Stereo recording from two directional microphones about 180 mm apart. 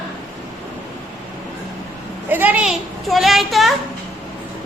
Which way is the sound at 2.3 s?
10° right (ahead or behind).